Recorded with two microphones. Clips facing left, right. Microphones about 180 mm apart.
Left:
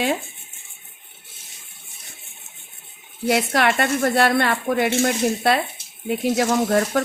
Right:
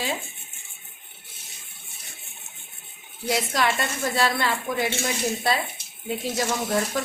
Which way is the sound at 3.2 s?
65° left (ahead or behind).